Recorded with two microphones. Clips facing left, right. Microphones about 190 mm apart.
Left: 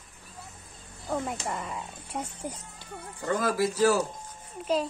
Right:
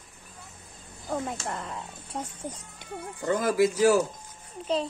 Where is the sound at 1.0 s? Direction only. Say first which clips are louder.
Even; centre (ahead or behind).